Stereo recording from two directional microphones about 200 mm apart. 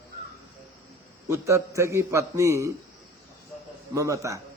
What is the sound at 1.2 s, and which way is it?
A man's voice, 15° right (ahead or behind).